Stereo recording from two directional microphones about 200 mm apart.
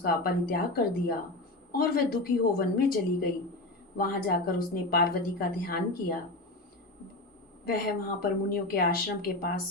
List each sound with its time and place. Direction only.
0.0 s speech: 45° left (ahead or behind)
3.9 s speech: 45° left (ahead or behind)
7.6 s speech: 45° left (ahead or behind)